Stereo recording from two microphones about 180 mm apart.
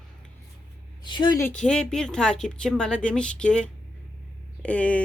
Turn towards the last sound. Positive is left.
turn(degrees=5)  # may be behind; listen again after turning